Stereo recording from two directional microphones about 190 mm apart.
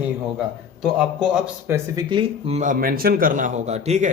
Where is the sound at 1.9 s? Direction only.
25° right (ahead or behind).